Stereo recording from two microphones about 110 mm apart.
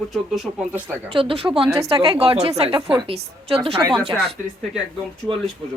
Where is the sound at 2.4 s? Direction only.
65° right (ahead or behind).